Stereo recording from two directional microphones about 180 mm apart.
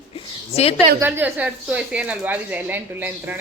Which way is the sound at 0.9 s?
10° right (ahead or behind).